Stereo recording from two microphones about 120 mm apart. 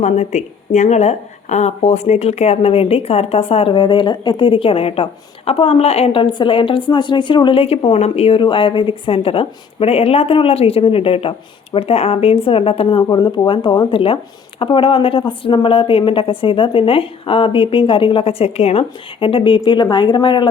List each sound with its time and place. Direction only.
0.0 s a woman's voice: 75° left (ahead or behind); by 8.4 s 60° left (ahead or behind)
8.4 s a woman's voice: 45° left (ahead or behind)
13.0 s a woman's voice: 35° left (ahead or behind)